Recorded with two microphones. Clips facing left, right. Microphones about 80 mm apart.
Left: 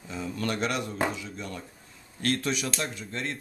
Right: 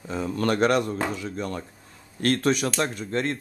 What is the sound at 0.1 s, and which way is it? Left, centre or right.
Speech, right.